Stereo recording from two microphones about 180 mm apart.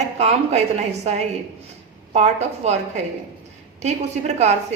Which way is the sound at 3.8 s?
40° right (ahead or behind).